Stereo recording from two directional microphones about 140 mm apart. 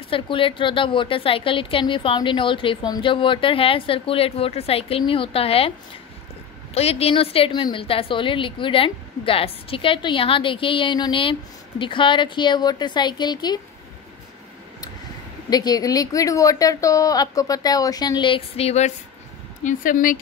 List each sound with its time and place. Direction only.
0.1 s a woman's voice: 40° left (ahead or behind)
6.7 s a woman's voice: 45° left (ahead or behind); by 13.6 s 30° left (ahead or behind)
15.5 s speech: 30° left (ahead or behind); by 18.9 s 50° left (ahead or behind)
19.6 s speech: 75° left (ahead or behind)